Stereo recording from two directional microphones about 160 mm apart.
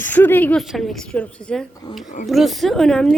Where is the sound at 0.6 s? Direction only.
Centre (ahead or behind).